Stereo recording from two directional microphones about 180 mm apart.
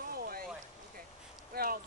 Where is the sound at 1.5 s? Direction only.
55° right (ahead or behind).